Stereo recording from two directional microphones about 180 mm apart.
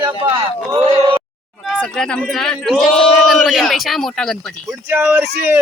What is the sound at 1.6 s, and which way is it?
Speech, centre (ahead or behind).